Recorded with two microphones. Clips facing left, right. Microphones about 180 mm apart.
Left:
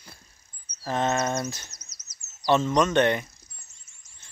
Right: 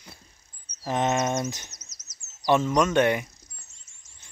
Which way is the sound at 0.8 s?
15° right (ahead or behind).